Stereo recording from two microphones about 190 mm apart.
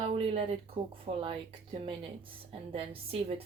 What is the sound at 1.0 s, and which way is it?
Speech, 30° right (ahead or behind).